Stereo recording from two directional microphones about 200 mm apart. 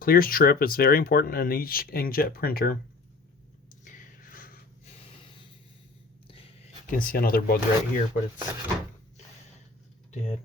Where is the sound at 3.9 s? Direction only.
40° left (ahead or behind).